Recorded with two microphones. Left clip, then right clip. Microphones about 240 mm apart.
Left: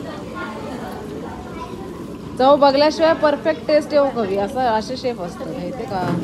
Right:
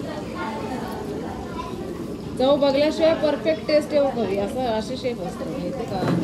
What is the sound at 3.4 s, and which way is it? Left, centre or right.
A woman's voice, left.